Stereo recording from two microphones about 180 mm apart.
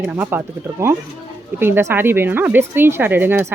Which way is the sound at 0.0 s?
10° right (ahead or behind).